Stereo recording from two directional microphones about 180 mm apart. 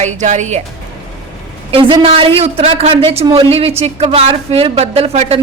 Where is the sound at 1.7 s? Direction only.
30° right (ahead or behind).